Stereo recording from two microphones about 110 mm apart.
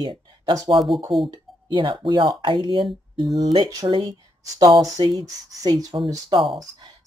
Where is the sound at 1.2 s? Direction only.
45° right (ahead or behind).